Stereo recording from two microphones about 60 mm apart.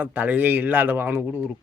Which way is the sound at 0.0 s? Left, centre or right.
Right.